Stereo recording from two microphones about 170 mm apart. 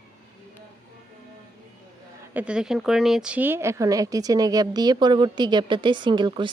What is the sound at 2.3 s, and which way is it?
Speech, 5° right (ahead or behind).